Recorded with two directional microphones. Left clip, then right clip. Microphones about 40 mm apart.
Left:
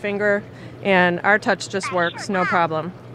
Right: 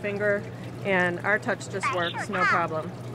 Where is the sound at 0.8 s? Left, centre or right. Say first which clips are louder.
Left 8 dB; left.